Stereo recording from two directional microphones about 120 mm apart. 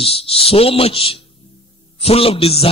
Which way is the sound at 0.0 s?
50° left (ahead or behind).